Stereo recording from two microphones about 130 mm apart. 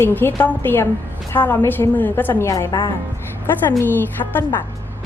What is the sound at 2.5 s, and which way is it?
Speech, 30° left (ahead or behind).